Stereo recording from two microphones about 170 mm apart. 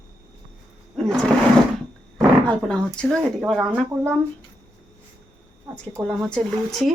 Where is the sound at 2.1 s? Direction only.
5° left (ahead or behind).